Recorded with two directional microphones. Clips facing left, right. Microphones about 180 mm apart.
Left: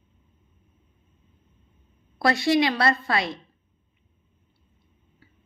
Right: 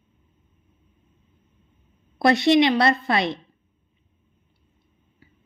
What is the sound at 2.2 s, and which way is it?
A woman's voice, 20° right (ahead or behind).